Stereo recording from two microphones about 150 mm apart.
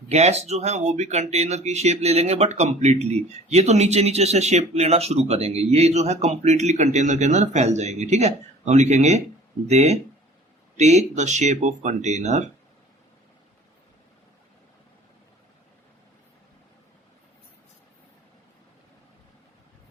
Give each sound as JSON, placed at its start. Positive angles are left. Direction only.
{"t": 0.1, "sound": "speech", "side_deg": -45}